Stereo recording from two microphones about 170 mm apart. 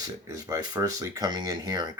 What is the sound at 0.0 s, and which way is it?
Speech, 20° right (ahead or behind).